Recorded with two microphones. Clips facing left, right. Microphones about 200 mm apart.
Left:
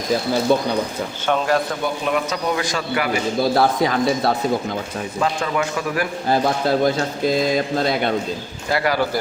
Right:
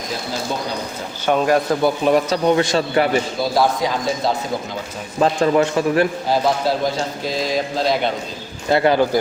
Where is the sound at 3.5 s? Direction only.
60° left (ahead or behind).